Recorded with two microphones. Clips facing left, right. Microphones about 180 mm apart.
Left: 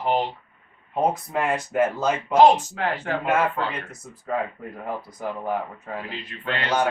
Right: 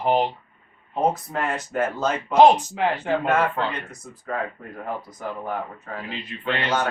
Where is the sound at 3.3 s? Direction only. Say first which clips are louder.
Left 2 dB; 5° left (ahead or behind).